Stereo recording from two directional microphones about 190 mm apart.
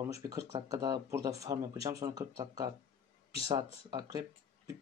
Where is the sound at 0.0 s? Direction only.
15° right (ahead or behind).